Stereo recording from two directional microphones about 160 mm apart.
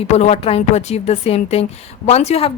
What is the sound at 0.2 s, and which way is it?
A woman's voice, 40° left (ahead or behind).